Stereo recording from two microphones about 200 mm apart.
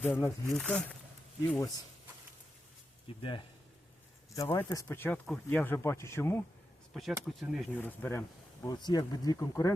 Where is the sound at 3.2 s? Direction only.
25° left (ahead or behind).